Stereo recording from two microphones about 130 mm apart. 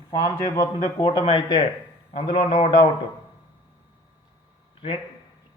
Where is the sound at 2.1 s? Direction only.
55° left (ahead or behind).